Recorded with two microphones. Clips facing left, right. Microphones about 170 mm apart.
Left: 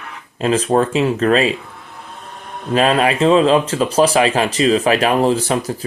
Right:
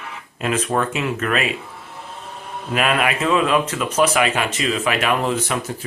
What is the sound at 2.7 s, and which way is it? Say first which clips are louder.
Speech: left 6 dB; 30° left (ahead or behind).